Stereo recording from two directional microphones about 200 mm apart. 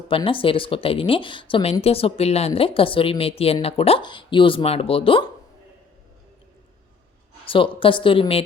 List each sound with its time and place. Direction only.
0.1 s speech: 25° left (ahead or behind)
7.4 s speech: 25° left (ahead or behind)